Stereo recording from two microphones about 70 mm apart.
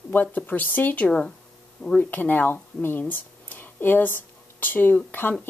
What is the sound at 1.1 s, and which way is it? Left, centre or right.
Speech, centre.